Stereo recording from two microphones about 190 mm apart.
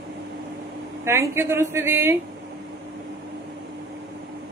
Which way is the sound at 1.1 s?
15° right (ahead or behind).